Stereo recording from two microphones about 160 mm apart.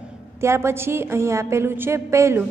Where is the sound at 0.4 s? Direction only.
15° right (ahead or behind).